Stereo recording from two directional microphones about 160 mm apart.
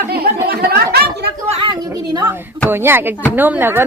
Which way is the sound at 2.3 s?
15° right (ahead or behind).